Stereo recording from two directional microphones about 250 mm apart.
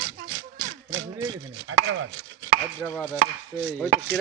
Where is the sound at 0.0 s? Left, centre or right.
Right.